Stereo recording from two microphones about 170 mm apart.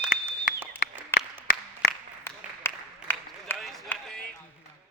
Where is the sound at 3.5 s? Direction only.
5° left (ahead or behind).